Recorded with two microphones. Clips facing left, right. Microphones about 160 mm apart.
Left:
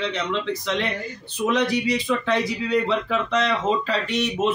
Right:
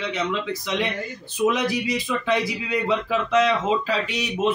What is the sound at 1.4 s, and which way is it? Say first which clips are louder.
A man's voice: even; 10° right (ahead or behind).